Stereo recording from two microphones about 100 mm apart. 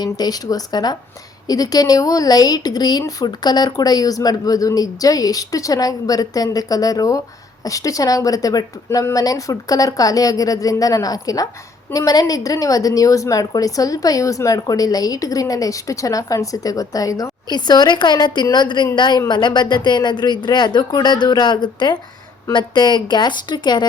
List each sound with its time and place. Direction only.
0.0 s a woman's voice: 40° left (ahead or behind)